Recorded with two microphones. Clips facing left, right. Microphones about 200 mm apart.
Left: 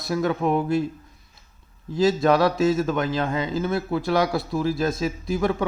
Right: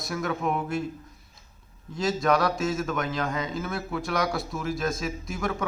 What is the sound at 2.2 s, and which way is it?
A man's voice, 25° left (ahead or behind).